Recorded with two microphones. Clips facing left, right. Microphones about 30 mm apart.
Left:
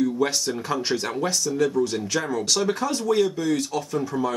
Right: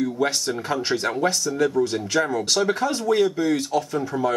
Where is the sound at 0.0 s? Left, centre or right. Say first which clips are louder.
Even; centre.